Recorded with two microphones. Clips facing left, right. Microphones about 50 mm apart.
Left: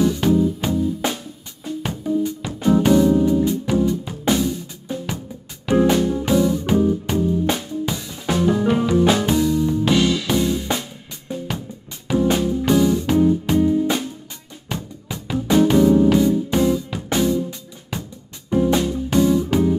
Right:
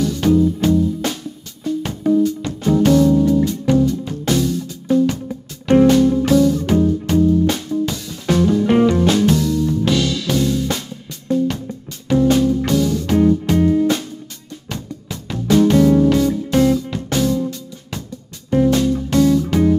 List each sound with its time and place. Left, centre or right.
0.0 s music: centre
13.6 s music: right
14.7 s music: centre